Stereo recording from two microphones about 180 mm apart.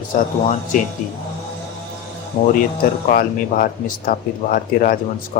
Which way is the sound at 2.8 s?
50° left (ahead or behind).